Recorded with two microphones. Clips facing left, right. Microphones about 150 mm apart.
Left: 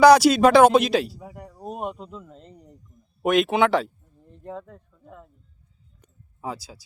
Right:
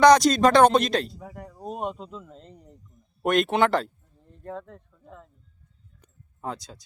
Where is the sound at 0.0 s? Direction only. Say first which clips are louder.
Left 3 dB; 5° left (ahead or behind).